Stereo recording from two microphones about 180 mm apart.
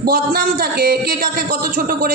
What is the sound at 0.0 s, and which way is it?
Speech, 50° right (ahead or behind).